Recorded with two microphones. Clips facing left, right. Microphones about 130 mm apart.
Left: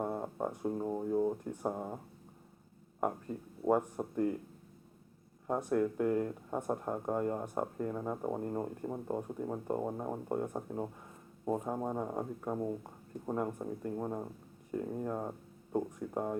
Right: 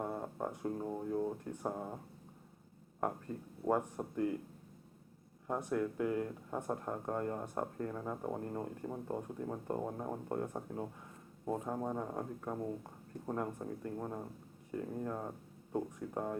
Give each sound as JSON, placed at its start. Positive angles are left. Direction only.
{"t": 0.0, "sound": "speech", "side_deg": 15}
{"t": 3.0, "sound": "speech", "side_deg": 10}
{"t": 5.5, "sound": "speech", "side_deg": 15}
{"t": 6.0, "sound": "speech", "side_deg": 0}
{"t": 6.2, "sound": "speech", "side_deg": 15}